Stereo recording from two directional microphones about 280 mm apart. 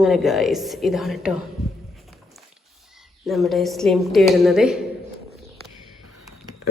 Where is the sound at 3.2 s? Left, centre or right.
Centre.